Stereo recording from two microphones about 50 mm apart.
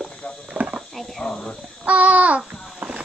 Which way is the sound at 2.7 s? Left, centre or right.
Right.